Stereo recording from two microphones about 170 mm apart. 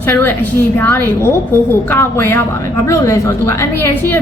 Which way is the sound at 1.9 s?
15° left (ahead or behind).